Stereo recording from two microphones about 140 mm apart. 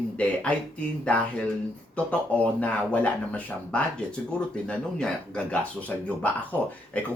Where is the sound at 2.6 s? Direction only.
10° left (ahead or behind).